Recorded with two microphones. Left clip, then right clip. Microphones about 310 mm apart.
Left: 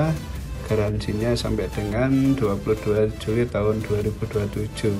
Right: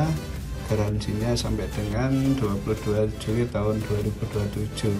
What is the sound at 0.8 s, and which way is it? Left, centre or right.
Speech, centre.